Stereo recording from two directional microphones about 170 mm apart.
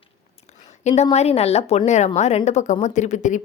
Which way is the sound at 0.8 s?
40° left (ahead or behind).